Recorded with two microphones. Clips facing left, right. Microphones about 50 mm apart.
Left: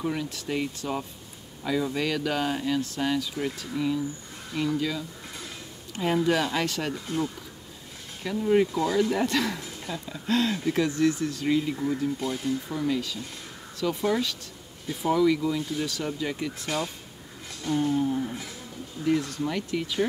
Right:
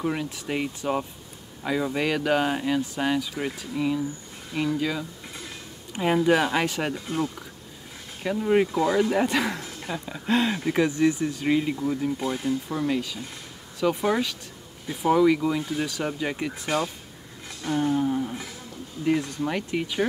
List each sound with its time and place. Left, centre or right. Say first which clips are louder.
0.0 s speech: right 2 dB; centre